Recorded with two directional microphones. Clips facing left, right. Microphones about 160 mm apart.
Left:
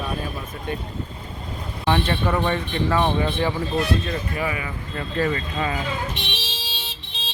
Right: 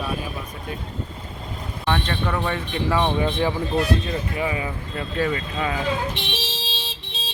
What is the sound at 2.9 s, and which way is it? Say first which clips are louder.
Speech: right 1 dB; 15° right (ahead or behind).